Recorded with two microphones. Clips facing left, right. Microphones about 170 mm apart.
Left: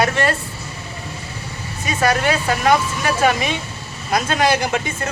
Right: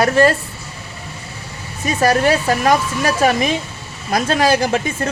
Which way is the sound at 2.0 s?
40° right (ahead or behind).